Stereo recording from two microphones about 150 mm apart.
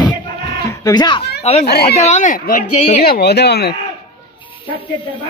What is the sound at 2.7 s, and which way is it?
Speech, 45° left (ahead or behind).